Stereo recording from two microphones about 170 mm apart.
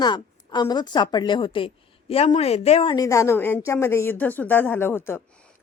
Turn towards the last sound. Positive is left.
turn(degrees=15)  # may be behind; listen again after turning